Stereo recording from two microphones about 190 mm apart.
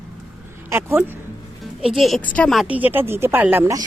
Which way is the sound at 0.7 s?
10° right (ahead or behind).